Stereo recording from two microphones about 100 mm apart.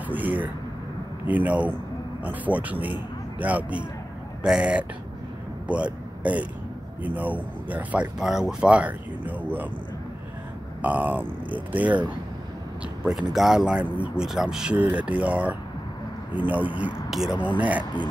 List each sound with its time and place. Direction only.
0.1 s speech: 15° right (ahead or behind)
7.0 s speech: 15° right (ahead or behind)
10.8 s speech: 15° right (ahead or behind)
13.0 s speech: 5° right (ahead or behind)
17.1 s speech: 5° right (ahead or behind)